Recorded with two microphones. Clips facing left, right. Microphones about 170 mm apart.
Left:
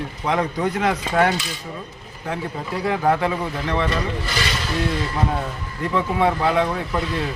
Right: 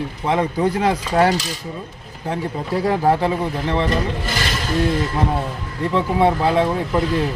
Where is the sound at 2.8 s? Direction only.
30° right (ahead or behind).